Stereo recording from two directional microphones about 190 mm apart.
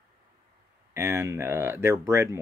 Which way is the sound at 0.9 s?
15° right (ahead or behind).